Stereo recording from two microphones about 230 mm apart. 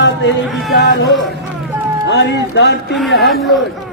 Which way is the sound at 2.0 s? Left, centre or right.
Left.